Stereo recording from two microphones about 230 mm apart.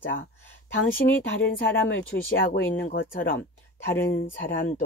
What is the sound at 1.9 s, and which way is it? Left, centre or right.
Speech, left.